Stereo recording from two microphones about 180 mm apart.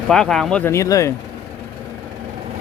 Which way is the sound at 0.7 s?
15° left (ahead or behind).